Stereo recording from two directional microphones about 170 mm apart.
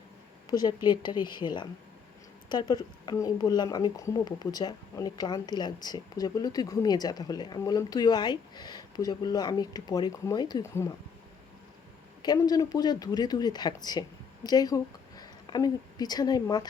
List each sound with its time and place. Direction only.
0.5 s a woman's voice: 25° left (ahead or behind)
12.2 s a woman's voice: 25° left (ahead or behind)